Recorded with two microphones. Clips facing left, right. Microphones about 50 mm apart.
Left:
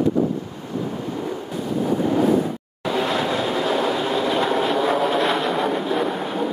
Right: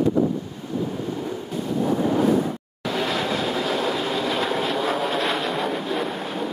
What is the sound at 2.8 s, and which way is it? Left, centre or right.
Vehicle, centre.